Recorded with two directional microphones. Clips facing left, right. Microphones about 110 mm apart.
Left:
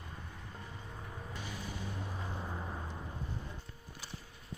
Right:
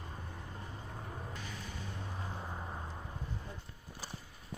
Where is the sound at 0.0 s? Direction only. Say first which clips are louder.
Right 2 dB; 35° right (ahead or behind).